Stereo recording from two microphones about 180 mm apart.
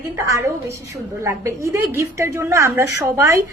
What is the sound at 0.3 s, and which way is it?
A woman's voice, 15° right (ahead or behind).